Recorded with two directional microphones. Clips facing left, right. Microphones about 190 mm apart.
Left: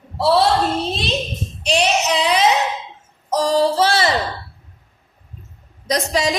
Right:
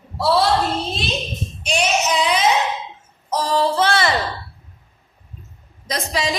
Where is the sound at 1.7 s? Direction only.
35° left (ahead or behind).